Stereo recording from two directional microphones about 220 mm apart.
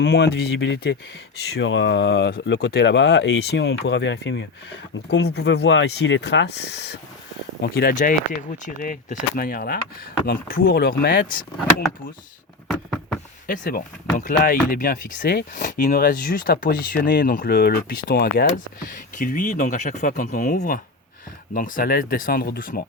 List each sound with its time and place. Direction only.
0.0 s speech: 50° left (ahead or behind)
12.6 s a sound: centre (ahead or behind)
13.5 s speech: 40° left (ahead or behind)